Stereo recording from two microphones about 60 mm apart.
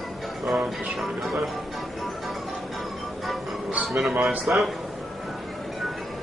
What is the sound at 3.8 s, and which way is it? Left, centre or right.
Speech, centre.